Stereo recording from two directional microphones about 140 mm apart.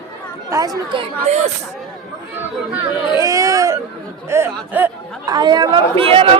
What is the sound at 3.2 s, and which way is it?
Speech, 25° right (ahead or behind).